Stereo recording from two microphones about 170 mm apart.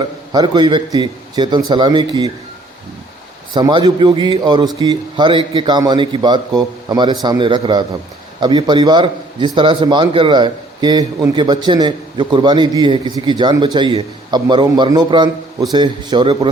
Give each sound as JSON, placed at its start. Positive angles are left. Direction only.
{"t": 0.3, "sound": "a man's voice", "side_deg": -25}
{"t": 3.5, "sound": "a man's voice", "side_deg": -25}